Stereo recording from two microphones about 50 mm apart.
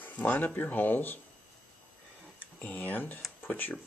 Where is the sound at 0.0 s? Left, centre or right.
Left.